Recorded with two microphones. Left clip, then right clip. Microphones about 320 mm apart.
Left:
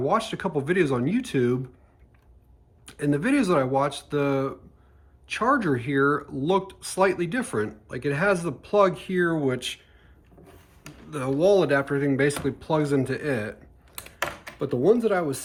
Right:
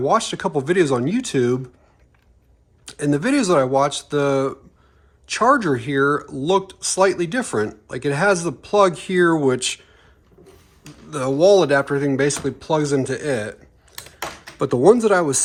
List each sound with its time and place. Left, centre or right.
0.0 s speech: centre
2.8 s speech: centre
11.1 s speech: centre
14.6 s speech: centre